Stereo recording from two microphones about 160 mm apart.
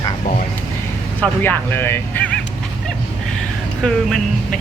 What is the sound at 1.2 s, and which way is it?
Speech, 10° left (ahead or behind).